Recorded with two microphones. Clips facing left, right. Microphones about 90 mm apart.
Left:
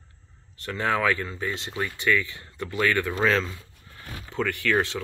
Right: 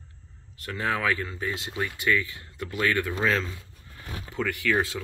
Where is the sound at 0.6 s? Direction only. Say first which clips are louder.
Left 3 dB; 5° right (ahead or behind).